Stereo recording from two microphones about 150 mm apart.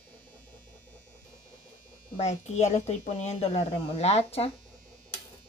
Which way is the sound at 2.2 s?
50° left (ahead or behind).